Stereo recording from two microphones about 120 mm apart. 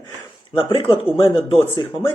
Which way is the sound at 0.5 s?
45° left (ahead or behind).